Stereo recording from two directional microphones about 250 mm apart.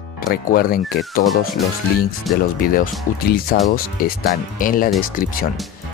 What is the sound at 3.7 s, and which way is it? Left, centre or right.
Speech, left.